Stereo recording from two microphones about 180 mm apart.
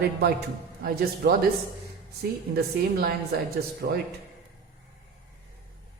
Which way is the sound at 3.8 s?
60° right (ahead or behind).